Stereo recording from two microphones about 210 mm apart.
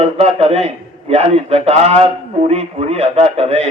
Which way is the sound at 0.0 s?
30° right (ahead or behind).